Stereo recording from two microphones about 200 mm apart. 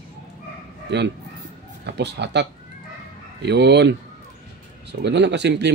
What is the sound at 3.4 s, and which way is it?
Speech, 60° right (ahead or behind).